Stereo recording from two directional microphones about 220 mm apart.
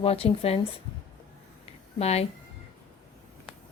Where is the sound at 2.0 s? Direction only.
30° left (ahead or behind).